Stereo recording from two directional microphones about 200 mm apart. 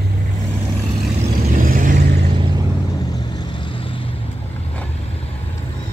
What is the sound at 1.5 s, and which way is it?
Vehicle, 45° right (ahead or behind).